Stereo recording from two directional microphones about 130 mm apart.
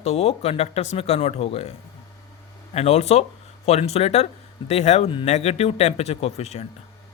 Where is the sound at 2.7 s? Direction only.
55° left (ahead or behind).